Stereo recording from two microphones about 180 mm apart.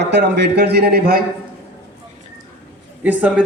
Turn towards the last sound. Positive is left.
turn(degrees=-10)  # may be behind; listen again after turning